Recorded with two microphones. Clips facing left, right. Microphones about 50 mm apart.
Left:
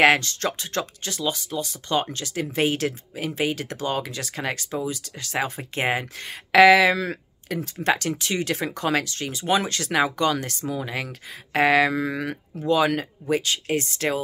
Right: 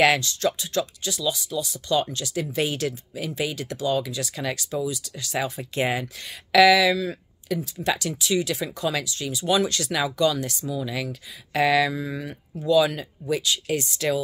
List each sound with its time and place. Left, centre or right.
0.0 s speech: left
12.0 s speech: left
12.5 s speech: left